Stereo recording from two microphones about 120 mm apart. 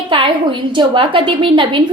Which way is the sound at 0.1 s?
45° right (ahead or behind).